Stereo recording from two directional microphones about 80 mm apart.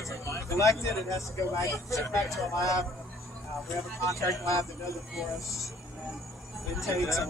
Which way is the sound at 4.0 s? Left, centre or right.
Left.